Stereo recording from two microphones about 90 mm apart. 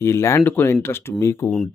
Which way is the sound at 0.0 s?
30° left (ahead or behind).